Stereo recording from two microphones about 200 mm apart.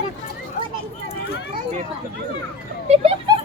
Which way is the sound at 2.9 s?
30° right (ahead or behind).